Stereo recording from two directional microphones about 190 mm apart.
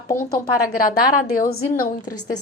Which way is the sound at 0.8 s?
45° left (ahead or behind).